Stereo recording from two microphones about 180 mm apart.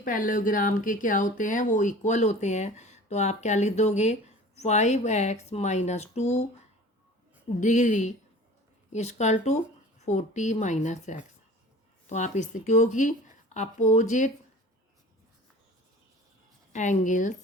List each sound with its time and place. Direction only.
0.0 s speech: 45° left (ahead or behind)
7.6 s speech: 40° left (ahead or behind)
16.7 s a woman's voice: 45° left (ahead or behind)